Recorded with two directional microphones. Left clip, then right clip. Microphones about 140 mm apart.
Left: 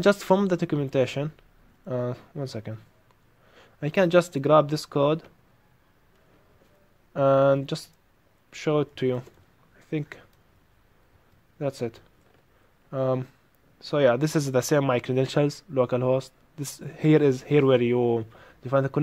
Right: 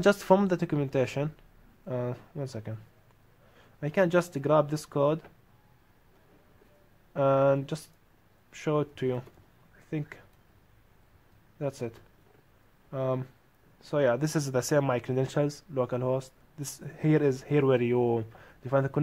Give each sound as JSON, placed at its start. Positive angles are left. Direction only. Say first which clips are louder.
{"t": 0.0, "sound": "speech", "louder": "left 2 dB", "side_deg": 15}
{"t": 7.2, "sound": "speech", "louder": "left 4 dB", "side_deg": 25}
{"t": 11.5, "sound": "speech", "louder": "left 5 dB", "side_deg": 25}